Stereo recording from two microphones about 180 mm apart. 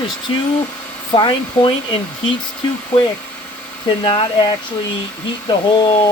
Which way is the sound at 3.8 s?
25° left (ahead or behind).